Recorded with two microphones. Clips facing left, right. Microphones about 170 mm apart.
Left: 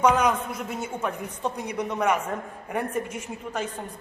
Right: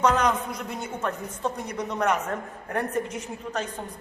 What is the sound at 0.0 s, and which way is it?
A woman's voice, 10° left (ahead or behind).